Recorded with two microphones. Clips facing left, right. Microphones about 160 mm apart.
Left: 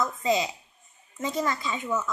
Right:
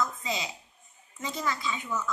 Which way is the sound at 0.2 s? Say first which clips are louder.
Left 9 dB; 45° left (ahead or behind).